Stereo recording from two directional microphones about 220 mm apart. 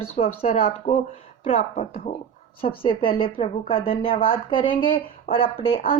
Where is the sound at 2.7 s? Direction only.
25° left (ahead or behind).